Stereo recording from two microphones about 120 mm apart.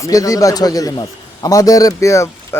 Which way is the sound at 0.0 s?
30° left (ahead or behind).